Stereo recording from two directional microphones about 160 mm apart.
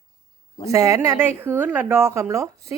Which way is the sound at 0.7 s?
20° right (ahead or behind).